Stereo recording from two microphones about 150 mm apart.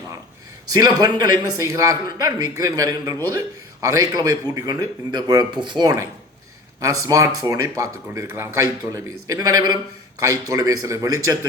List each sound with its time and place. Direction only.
0.7 s speech: 25° right (ahead or behind)